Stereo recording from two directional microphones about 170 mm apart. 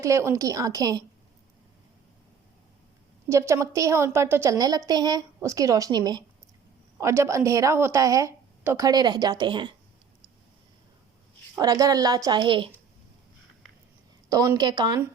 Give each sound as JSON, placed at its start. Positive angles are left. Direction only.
{"t": 0.0, "sound": "a woman's voice", "side_deg": -15}
{"t": 3.2, "sound": "a woman's voice", "side_deg": -15}
{"t": 11.5, "sound": "a woman's voice", "side_deg": -20}
{"t": 14.3, "sound": "a woman's voice", "side_deg": -20}